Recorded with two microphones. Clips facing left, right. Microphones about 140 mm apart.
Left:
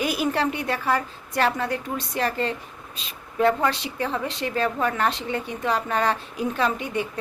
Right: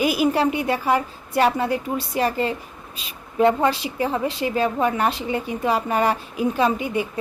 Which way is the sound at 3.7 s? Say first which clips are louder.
Right 4 dB; 5° right (ahead or behind).